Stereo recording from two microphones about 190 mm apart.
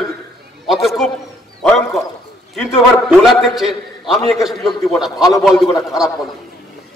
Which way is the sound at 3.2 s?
Centre (ahead or behind).